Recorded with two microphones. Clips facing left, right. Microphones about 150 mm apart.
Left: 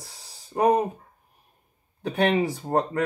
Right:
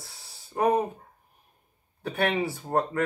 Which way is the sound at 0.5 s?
15° left (ahead or behind).